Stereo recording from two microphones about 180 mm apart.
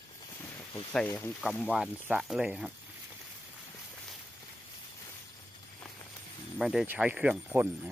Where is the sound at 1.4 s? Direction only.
Centre (ahead or behind).